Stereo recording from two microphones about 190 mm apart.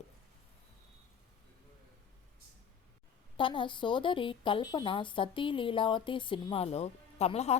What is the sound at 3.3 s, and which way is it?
Speech, 25° left (ahead or behind).